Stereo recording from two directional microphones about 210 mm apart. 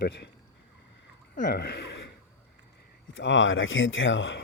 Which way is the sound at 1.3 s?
40° left (ahead or behind).